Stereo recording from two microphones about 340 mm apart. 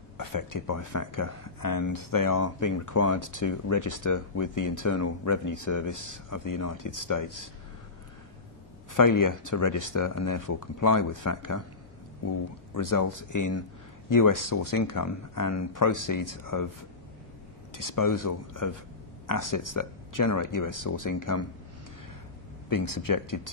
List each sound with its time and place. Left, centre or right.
0.2 s speech: left
2.4 s speech: left
8.9 s speech: left
17.7 s speech: left
22.7 s speech: left